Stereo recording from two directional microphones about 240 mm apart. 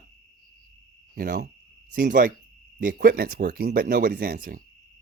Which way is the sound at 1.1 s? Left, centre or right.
Right.